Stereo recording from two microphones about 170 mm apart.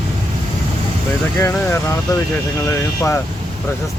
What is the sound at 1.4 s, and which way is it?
Speech, 15° left (ahead or behind).